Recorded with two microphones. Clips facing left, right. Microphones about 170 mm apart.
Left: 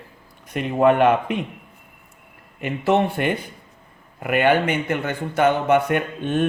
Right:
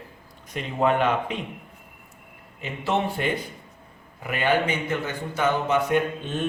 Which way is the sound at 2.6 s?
60° left (ahead or behind).